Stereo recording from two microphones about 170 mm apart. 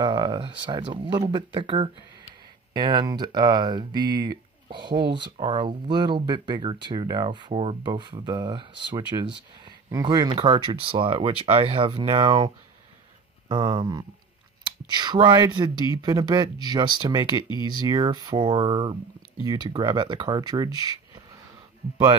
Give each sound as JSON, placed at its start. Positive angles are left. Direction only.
{"t": 0.0, "sound": "speech", "side_deg": -25}